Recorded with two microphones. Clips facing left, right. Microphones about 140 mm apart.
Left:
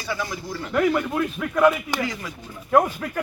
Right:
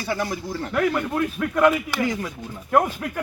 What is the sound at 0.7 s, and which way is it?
Speech, 5° left (ahead or behind).